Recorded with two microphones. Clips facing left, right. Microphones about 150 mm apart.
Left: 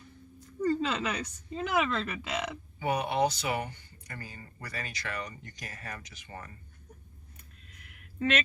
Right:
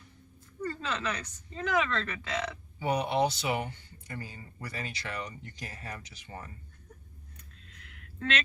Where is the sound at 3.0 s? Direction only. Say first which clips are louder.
Even; 25° right (ahead or behind).